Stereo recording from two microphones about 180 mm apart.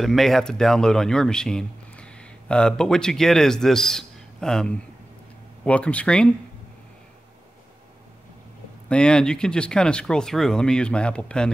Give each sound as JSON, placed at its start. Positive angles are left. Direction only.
{"t": 0.0, "sound": "speech", "side_deg": 0}
{"t": 8.8, "sound": "speech", "side_deg": 5}